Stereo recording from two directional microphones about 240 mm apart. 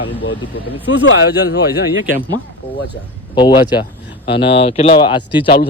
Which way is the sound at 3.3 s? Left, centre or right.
Centre.